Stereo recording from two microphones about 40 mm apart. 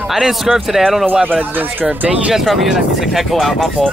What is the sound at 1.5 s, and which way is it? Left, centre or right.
Speech, right.